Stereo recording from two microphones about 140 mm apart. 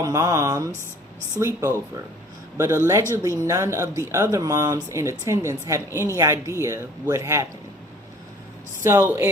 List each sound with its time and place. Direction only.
0.0 s a woman's voice: 25° right (ahead or behind)
8.8 s a woman's voice: 20° right (ahead or behind)